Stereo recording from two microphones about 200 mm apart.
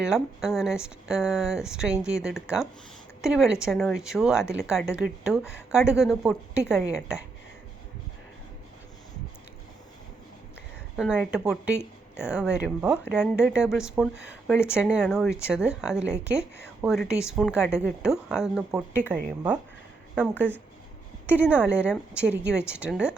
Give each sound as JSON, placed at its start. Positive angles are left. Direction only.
{"t": 0.0, "sound": "speech", "side_deg": -5}
{"t": 10.9, "sound": "a woman's voice", "side_deg": 0}
{"t": 21.5, "sound": "speech", "side_deg": -5}